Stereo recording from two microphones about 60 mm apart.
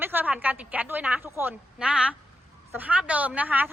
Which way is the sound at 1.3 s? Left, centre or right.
Right.